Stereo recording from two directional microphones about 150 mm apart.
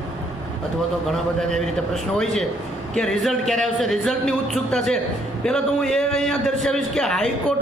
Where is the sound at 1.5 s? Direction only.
Centre (ahead or behind).